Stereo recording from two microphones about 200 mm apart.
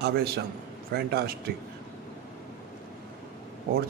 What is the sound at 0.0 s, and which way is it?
A man's voice, 55° right (ahead or behind).